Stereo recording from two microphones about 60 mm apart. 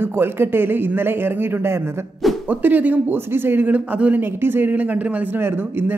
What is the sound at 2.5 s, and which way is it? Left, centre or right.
Speech, right.